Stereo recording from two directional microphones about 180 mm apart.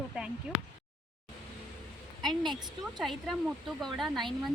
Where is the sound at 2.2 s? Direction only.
Centre (ahead or behind).